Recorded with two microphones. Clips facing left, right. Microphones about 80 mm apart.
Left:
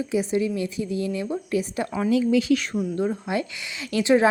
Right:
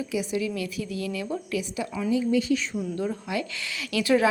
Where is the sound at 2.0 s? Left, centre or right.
Left.